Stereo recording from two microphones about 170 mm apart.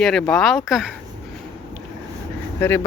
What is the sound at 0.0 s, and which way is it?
Speech, 5° left (ahead or behind).